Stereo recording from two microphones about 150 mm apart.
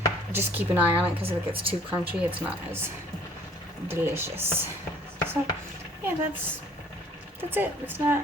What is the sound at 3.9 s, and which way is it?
Speech, 15° right (ahead or behind).